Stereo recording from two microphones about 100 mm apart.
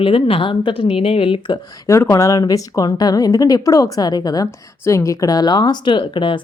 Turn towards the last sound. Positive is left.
turn(degrees=55)  # may be behind; listen again after turning